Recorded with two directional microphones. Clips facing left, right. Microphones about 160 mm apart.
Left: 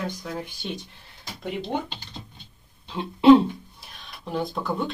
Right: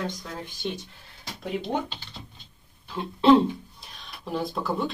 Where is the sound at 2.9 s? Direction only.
20° left (ahead or behind).